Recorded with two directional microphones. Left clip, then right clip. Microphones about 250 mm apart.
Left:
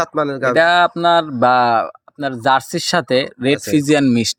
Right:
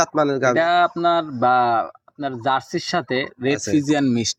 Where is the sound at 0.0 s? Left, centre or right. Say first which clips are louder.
Even; centre.